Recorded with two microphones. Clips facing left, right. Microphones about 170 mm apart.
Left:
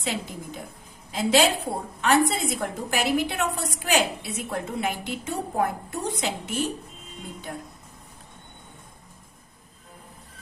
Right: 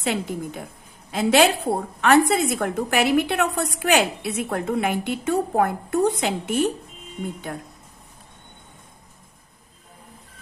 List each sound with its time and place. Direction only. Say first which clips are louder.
0.0 s a woman's voice: right 6 dB; 65° right (ahead or behind)